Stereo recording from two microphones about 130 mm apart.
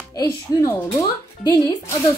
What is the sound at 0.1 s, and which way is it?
A woman's voice, 25° left (ahead or behind).